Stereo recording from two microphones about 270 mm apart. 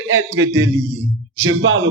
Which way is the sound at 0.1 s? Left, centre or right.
Right.